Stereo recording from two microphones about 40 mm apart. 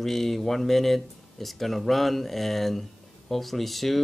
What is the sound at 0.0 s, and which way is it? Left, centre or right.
Speech, centre.